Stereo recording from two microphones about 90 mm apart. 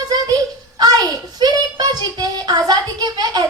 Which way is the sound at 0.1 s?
45° right (ahead or behind).